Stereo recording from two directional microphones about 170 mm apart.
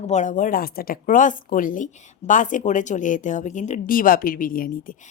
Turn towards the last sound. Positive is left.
turn(degrees=55)  # may be behind; listen again after turning